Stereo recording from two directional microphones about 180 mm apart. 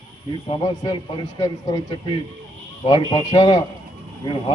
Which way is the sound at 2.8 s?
25° left (ahead or behind).